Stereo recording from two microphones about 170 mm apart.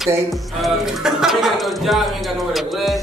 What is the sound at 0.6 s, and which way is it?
Speech, centre (ahead or behind).